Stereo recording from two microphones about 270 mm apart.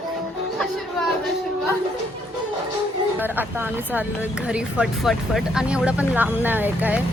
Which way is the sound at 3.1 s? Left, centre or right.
Centre.